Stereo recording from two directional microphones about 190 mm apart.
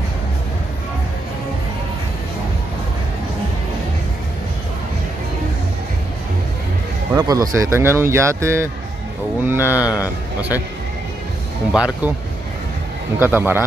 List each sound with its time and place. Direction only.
7.2 s speech: 20° right (ahead or behind)
9.8 s a man's voice: 15° left (ahead or behind)
11.7 s speech: 5° right (ahead or behind)
13.2 s speech: 10° right (ahead or behind)